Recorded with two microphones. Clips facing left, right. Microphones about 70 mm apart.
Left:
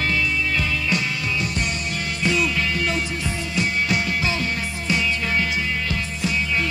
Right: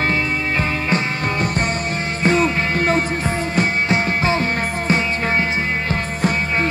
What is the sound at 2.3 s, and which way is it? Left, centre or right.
Music, right.